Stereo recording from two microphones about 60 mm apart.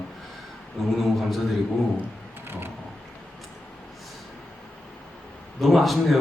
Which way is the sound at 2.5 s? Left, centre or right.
Right.